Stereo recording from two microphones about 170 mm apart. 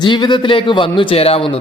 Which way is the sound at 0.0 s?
25° left (ahead or behind).